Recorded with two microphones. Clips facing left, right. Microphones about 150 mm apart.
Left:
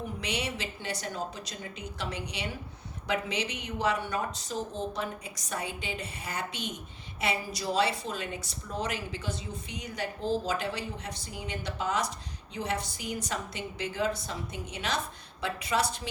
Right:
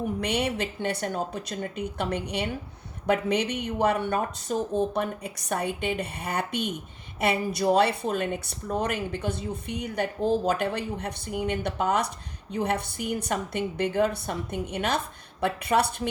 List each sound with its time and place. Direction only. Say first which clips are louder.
0.2 s a woman's voice: right 5 dB; 55° right (ahead or behind)